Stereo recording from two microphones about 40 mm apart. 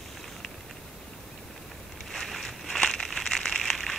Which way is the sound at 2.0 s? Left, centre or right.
Centre.